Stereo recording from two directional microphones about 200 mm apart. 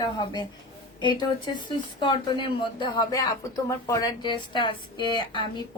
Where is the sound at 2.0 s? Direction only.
25° left (ahead or behind).